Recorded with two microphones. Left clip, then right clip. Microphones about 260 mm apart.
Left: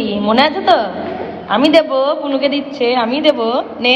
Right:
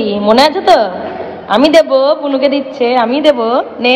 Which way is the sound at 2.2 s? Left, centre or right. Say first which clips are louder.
Right 4 dB; centre.